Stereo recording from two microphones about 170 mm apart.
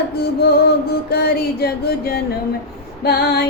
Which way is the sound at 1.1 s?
70° left (ahead or behind).